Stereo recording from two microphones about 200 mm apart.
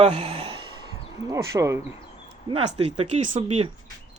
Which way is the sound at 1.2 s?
15° right (ahead or behind).